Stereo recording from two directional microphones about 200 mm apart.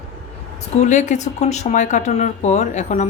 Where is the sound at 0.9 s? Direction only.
35° left (ahead or behind).